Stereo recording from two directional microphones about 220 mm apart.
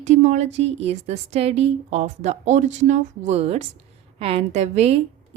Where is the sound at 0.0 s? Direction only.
30° right (ahead or behind).